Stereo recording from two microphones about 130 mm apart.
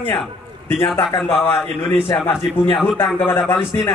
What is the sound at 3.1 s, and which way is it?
Speech, 15° left (ahead or behind).